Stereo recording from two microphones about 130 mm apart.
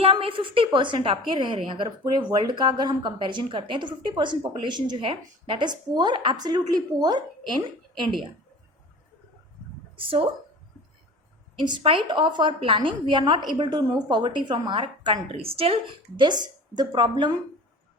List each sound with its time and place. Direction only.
0.0 s a woman's voice: 45° right (ahead or behind)
10.0 s a woman's voice: 40° right (ahead or behind)
11.6 s a woman's voice: 40° right (ahead or behind)